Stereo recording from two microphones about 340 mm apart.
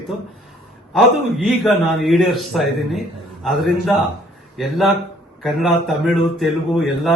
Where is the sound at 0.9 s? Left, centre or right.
Centre.